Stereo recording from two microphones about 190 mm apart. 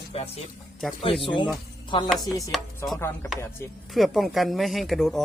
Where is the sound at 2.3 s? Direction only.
15° left (ahead or behind).